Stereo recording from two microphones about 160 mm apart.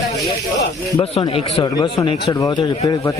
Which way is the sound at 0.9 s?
35° left (ahead or behind).